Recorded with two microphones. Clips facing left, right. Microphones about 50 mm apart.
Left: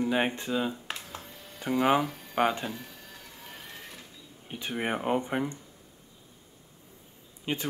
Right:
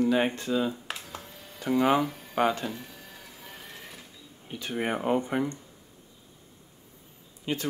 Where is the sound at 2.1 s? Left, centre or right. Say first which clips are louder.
Even; centre.